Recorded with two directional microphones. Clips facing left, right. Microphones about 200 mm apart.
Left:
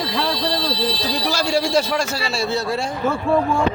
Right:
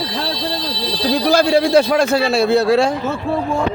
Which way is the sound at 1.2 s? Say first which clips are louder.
Right 7 dB; 55° right (ahead or behind).